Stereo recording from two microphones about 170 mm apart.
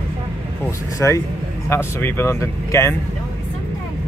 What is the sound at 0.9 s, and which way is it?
Speech, 20° left (ahead or behind).